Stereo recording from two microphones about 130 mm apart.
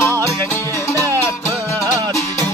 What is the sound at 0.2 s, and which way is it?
Music, 20° left (ahead or behind).